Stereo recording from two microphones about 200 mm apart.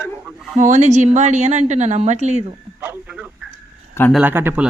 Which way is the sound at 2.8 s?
5° right (ahead or behind).